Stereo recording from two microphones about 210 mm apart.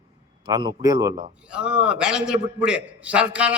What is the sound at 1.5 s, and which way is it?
A man's voice, 5° right (ahead or behind).